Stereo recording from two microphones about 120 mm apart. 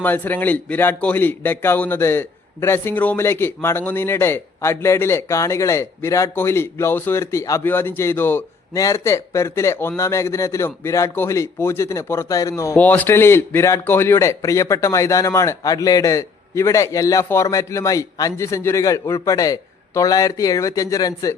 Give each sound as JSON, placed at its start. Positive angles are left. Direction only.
{"t": 0.0, "sound": "speech", "side_deg": 15}
{"t": 12.7, "sound": "speech", "side_deg": 15}